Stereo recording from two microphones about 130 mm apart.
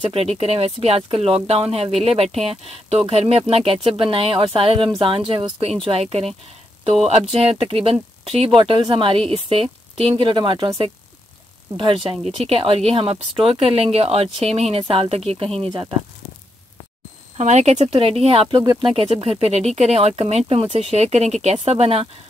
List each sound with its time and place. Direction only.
0.0 s speech: 50° right (ahead or behind)
7.3 s speech: 50° right (ahead or behind)
17.4 s speech: 60° right (ahead or behind)
18.6 s speech: 30° right (ahead or behind)
18.9 s speech: 45° right (ahead or behind)